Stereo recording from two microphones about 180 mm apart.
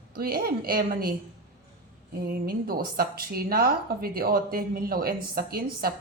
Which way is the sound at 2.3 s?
55° right (ahead or behind).